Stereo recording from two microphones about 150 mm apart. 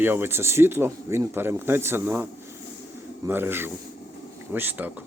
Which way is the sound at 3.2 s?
15° right (ahead or behind).